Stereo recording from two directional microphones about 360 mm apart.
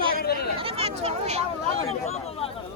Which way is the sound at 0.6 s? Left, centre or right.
Centre.